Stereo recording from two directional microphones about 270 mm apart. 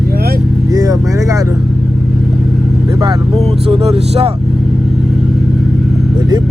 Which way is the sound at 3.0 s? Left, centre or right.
Centre.